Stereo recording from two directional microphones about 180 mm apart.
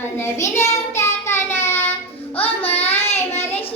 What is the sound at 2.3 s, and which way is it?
Child singing, 30° left (ahead or behind).